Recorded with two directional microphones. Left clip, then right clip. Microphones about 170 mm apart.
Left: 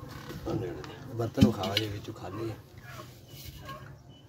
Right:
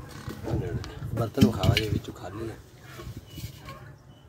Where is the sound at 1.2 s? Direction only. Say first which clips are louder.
Right 2 dB; 25° right (ahead or behind).